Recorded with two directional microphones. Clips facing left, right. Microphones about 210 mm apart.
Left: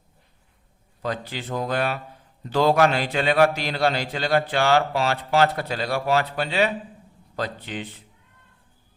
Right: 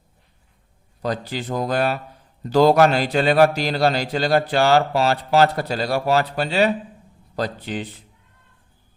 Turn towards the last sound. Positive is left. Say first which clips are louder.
# right 4 dB
turn(degrees=-35)  # may be behind; listen again after turning